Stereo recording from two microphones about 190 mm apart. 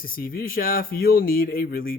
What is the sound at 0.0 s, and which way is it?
Speech, 50° left (ahead or behind).